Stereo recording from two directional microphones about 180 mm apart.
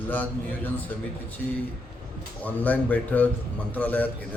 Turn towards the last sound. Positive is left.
turn(degrees=10)  # may be behind; listen again after turning